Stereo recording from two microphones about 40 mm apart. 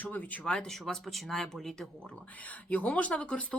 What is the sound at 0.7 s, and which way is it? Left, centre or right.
Speech, centre.